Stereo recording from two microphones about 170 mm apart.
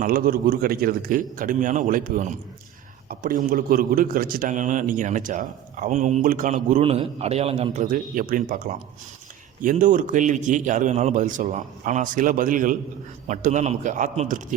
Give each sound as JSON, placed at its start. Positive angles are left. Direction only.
{"t": 0.0, "sound": "a man's voice", "side_deg": -60}
{"t": 6.8, "sound": "a man's voice", "side_deg": -35}
{"t": 7.9, "sound": "a man's voice", "side_deg": -50}